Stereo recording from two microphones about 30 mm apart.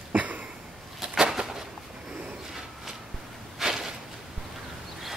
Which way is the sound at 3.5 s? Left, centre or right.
Centre.